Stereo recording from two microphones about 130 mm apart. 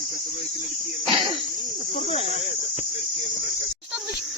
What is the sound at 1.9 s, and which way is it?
Speech, 50° left (ahead or behind).